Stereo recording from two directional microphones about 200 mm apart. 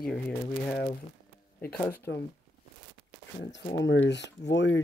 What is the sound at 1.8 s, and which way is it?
Speech, 10° left (ahead or behind).